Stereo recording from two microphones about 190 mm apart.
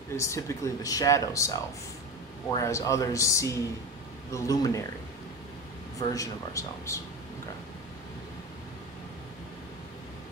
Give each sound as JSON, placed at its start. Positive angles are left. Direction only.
{"t": 0.1, "sound": "speech", "side_deg": 15}
{"t": 5.9, "sound": "speech", "side_deg": 15}